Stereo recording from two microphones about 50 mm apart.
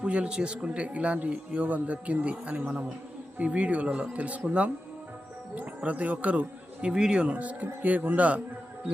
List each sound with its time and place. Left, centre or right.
0.0 s speech: right
6.8 s speech: centre